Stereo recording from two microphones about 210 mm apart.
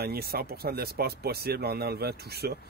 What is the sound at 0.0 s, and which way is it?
Speech, 50° right (ahead or behind).